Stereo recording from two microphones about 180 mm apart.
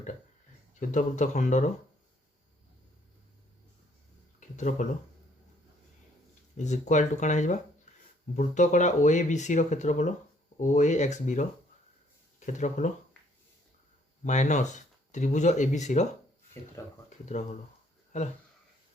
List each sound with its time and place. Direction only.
0.8 s speech: 45° left (ahead or behind)
4.4 s speech: 40° left (ahead or behind)
6.6 s speech: 40° left (ahead or behind)
12.5 s speech: 40° left (ahead or behind)
14.3 s speech: 40° left (ahead or behind)
18.1 s speech: 40° left (ahead or behind)